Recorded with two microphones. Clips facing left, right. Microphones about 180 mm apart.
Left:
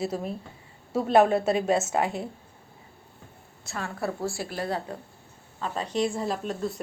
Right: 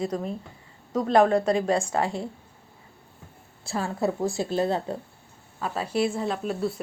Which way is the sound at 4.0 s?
20° right (ahead or behind).